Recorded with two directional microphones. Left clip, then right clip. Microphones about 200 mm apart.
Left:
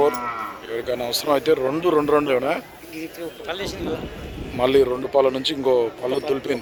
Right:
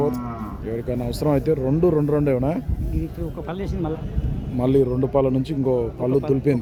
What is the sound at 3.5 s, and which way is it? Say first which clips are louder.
Speech: left 5 dB; 50° right (ahead or behind).